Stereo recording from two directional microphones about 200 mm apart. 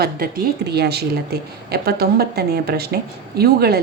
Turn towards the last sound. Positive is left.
turn(degrees=-50)  # may be behind; listen again after turning